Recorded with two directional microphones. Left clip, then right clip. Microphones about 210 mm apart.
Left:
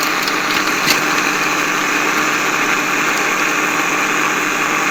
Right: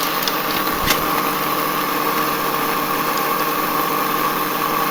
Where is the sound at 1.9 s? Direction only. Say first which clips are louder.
Left 4 dB; 60° right (ahead or behind).